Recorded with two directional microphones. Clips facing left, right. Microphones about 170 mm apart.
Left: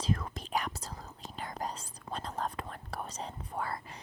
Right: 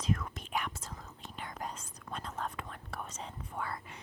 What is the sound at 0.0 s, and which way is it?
Whispering, 30° left (ahead or behind).